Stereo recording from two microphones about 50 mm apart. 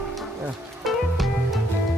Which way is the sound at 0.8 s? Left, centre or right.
Centre.